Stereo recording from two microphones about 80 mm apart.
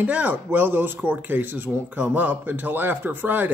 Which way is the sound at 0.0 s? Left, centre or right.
Centre.